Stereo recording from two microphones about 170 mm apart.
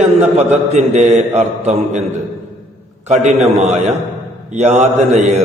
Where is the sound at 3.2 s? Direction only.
40° right (ahead or behind).